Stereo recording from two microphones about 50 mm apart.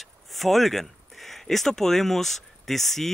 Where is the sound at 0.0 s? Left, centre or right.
Centre.